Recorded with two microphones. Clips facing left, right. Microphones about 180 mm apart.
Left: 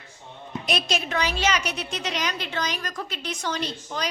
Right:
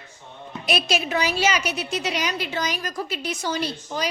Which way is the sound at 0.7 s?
5° right (ahead or behind).